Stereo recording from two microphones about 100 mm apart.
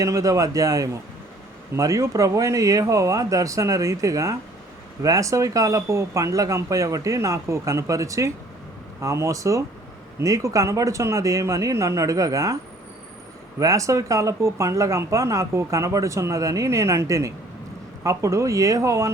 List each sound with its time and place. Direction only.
0.0 s speech: 35° right (ahead or behind)
13.6 s speech: 35° right (ahead or behind)